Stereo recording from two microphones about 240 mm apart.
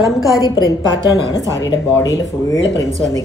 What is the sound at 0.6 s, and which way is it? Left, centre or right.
Speech, centre.